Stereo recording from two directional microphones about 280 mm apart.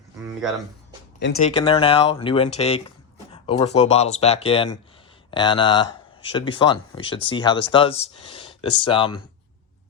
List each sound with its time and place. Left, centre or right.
1.4 s speech: left